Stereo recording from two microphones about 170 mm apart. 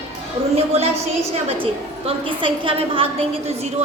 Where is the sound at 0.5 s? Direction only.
35° right (ahead or behind).